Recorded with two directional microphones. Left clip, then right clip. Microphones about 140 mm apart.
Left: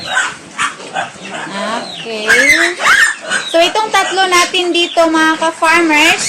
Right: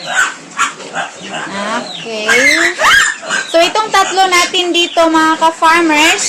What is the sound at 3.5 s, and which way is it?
Speech, 5° right (ahead or behind).